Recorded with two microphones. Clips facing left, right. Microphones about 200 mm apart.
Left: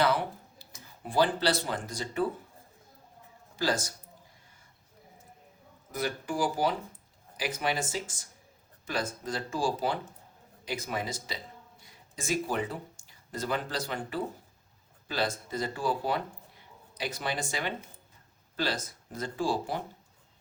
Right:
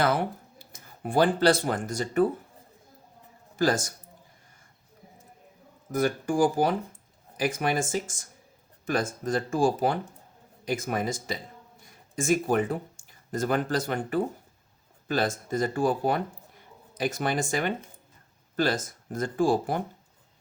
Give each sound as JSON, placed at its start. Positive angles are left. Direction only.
{"t": 0.6, "sound": "speech", "side_deg": -55}
{"t": 3.6, "sound": "speech", "side_deg": -50}
{"t": 5.9, "sound": "speech", "side_deg": -50}